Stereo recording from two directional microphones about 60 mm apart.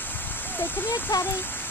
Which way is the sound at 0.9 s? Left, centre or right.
Left.